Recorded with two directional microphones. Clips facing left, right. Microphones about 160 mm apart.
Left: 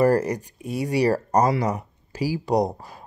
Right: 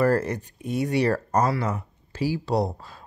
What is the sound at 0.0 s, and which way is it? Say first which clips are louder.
Speech: left 3 dB; 10° left (ahead or behind).